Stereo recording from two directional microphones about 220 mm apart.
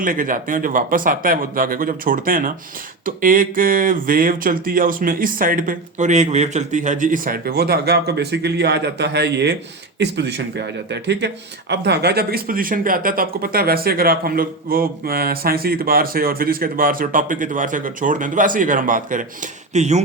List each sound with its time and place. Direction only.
0.0 s speech: 40° right (ahead or behind)